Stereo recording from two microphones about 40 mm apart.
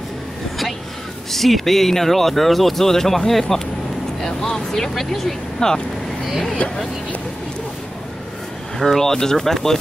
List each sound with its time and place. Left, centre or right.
1.3 s speech: centre
8.7 s speech: centre